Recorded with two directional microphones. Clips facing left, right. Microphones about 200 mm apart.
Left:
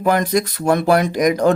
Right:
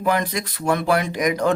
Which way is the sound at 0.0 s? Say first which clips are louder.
Left 5 dB; 45° left (ahead or behind).